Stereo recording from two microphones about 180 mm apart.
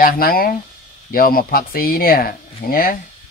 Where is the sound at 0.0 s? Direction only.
55° left (ahead or behind).